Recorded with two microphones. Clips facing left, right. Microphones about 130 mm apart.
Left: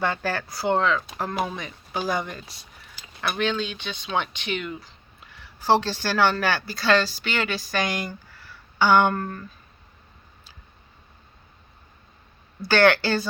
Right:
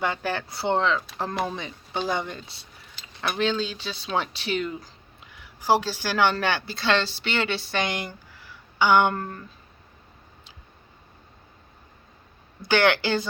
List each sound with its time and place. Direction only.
0.0 s speech: 15° right (ahead or behind); by 4.9 s 35° right (ahead or behind)
5.3 s speech: 15° right (ahead or behind)
12.6 s speech: 15° right (ahead or behind)